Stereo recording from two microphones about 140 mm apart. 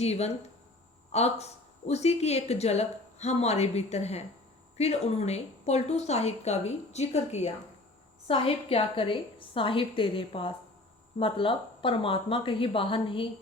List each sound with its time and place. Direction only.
0.0 s a woman's voice: 50° left (ahead or behind)
8.3 s a woman's voice: 40° left (ahead or behind)